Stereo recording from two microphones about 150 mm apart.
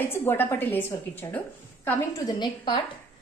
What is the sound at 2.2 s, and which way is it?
Speech, 30° left (ahead or behind).